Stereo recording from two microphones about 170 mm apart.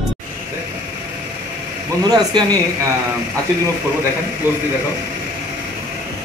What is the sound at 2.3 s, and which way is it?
Speech, 25° right (ahead or behind).